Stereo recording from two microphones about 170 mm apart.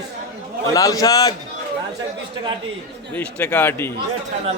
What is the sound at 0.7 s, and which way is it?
Speech, 20° left (ahead or behind).